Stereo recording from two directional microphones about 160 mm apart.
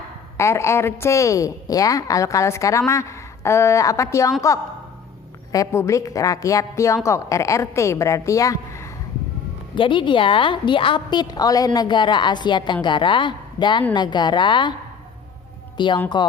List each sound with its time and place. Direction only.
0.3 s a woman's voice: 15° left (ahead or behind)
9.7 s a woman's voice: 30° left (ahead or behind)
15.8 s a woman's voice: 30° left (ahead or behind)